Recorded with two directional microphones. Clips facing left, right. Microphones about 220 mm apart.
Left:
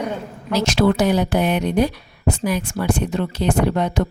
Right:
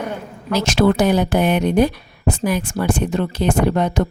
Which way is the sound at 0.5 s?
50° right (ahead or behind).